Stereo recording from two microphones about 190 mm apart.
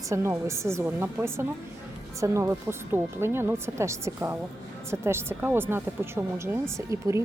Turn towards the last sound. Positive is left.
turn(degrees=-15)  # may be behind; listen again after turning